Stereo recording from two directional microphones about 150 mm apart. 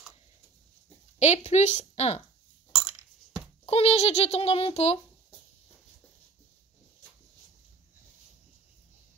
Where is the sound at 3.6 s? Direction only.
40° left (ahead or behind).